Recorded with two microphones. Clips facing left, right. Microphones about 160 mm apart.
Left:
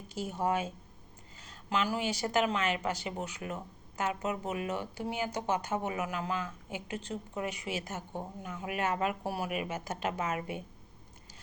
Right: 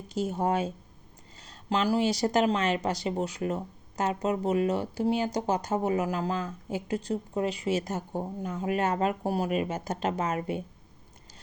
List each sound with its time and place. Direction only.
0.3 s speech: 40° right (ahead or behind)